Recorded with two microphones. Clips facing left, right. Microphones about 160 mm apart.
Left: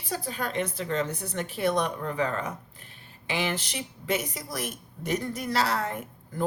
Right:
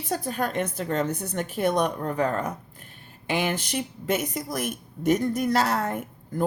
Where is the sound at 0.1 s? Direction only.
50° right (ahead or behind).